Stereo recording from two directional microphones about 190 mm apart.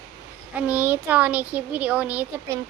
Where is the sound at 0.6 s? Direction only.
5° right (ahead or behind).